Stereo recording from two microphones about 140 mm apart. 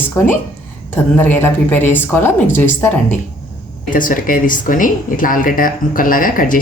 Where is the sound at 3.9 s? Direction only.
75° left (ahead or behind).